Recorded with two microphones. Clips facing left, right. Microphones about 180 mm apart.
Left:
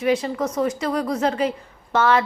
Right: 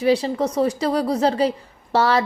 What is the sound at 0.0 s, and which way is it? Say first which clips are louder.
A woman's voice: right 2 dB; 30° right (ahead or behind).